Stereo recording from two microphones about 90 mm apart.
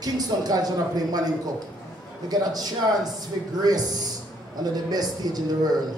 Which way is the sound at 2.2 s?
45° right (ahead or behind).